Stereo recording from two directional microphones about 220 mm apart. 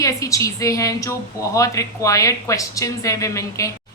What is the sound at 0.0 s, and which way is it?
A woman's voice, 15° left (ahead or behind).